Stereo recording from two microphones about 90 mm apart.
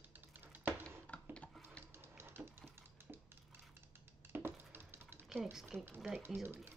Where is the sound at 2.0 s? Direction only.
25° right (ahead or behind).